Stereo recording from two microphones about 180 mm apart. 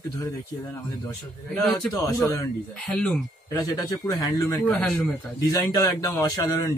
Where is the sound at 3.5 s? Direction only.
20° left (ahead or behind).